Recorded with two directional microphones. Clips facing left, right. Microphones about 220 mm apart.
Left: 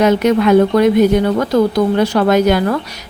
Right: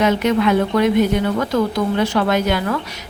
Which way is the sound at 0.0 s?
40° left (ahead or behind).